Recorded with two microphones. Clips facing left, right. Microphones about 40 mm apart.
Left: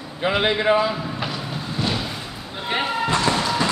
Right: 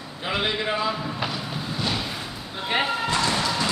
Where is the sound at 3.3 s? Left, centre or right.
Centre.